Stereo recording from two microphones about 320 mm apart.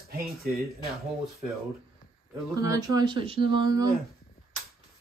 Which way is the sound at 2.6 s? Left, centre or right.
Centre.